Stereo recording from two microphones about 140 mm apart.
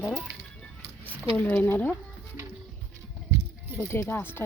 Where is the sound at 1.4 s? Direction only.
10° left (ahead or behind).